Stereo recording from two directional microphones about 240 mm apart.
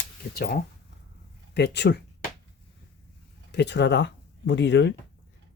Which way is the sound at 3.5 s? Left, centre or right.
Left.